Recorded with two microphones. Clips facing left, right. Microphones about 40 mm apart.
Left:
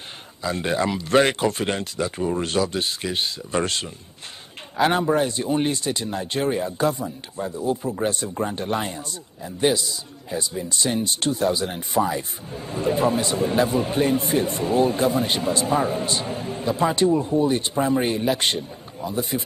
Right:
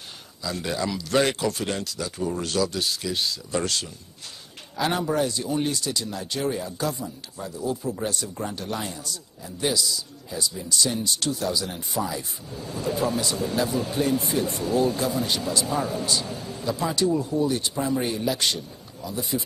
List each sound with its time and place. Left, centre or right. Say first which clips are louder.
0.4 s speech: left 5 dB; left